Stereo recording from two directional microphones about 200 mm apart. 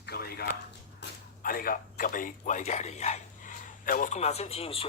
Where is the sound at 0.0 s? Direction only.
50° left (ahead or behind).